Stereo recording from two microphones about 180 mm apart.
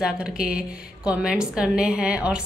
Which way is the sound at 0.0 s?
5° right (ahead or behind).